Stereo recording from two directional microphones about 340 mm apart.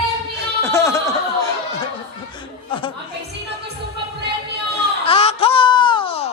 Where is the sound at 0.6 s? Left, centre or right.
Centre.